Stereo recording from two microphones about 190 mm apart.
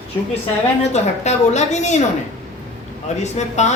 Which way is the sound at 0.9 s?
35° left (ahead or behind).